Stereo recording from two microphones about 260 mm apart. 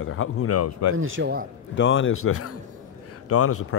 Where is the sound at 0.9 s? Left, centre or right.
Right.